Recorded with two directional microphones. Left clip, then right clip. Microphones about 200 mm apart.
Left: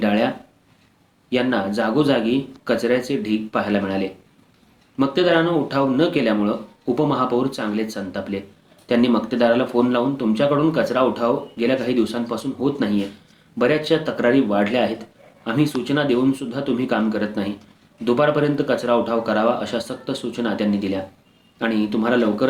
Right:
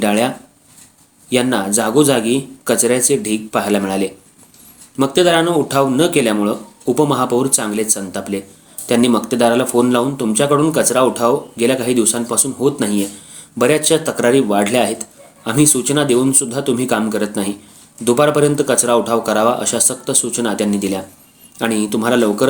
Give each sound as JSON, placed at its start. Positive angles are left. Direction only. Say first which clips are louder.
{"t": 0.0, "sound": "speech", "louder": "right 4 dB", "side_deg": -45}